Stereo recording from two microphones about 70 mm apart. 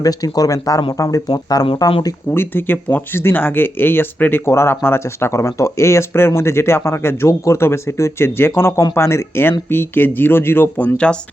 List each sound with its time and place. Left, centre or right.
0.0 s speech: left
2.3 s speech: left
10.8 s speech: centre